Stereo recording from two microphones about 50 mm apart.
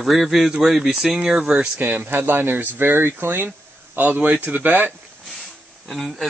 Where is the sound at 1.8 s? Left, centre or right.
Right.